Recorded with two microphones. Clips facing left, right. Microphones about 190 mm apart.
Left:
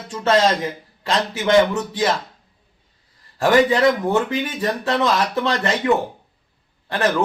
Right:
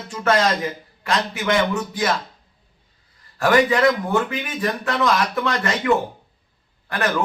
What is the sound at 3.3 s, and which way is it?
A man's voice, 25° left (ahead or behind).